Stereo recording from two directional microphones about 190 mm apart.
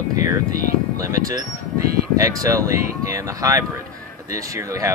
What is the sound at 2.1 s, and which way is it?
Speech, 15° right (ahead or behind).